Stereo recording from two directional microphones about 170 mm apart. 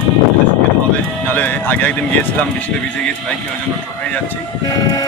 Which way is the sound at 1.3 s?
10° left (ahead or behind).